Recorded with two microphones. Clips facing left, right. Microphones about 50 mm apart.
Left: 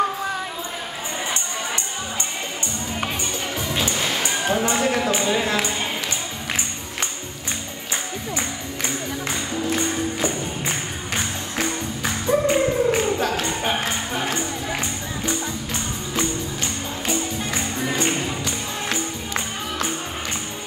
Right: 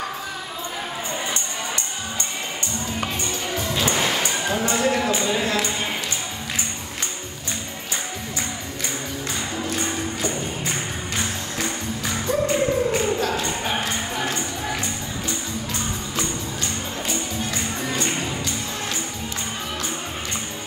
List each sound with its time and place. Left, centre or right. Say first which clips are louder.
3.5 s music: right 1 dB; centre
3.8 s music: right 4 dB; right
4.2 s a sound: left 2 dB; left
4.7 s speech: even; centre
9.8 s music: left 3 dB; left
12.0 s music: left 3 dB; left
17.5 s music: left 2 dB; left